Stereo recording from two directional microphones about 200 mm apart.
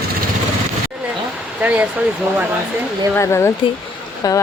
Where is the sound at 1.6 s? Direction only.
5° right (ahead or behind).